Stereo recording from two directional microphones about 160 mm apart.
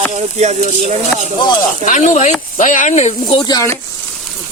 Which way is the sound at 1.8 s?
50° left (ahead or behind).